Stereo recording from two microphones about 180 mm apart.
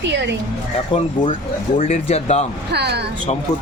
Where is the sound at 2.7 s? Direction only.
65° right (ahead or behind).